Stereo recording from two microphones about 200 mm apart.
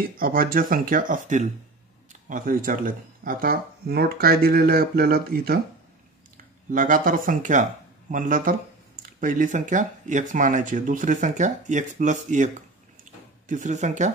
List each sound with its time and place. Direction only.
0.0 s speech: 45° right (ahead or behind)
13.5 s speech: 35° right (ahead or behind)